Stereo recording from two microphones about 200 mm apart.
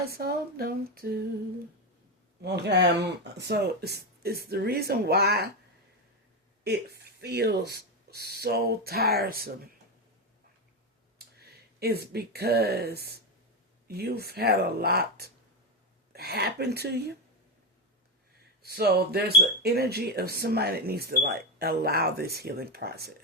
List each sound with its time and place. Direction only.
0.0 s speech: 50° right (ahead or behind)
2.4 s speech: 60° right (ahead or behind)
6.7 s speech: 55° right (ahead or behind)
11.3 s speech: 50° right (ahead or behind)
18.6 s speech: 50° right (ahead or behind)